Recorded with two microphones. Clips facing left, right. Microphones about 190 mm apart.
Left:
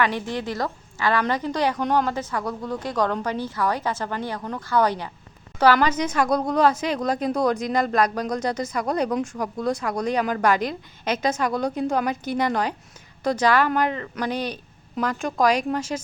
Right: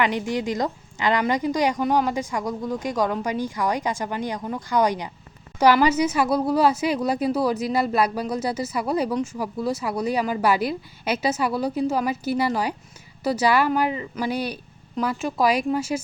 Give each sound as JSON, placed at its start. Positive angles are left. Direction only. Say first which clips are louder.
{"t": 0.0, "sound": "a woman's voice", "louder": "right 1 dB", "side_deg": -15}